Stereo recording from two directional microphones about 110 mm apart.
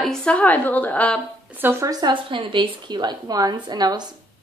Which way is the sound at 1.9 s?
45° right (ahead or behind).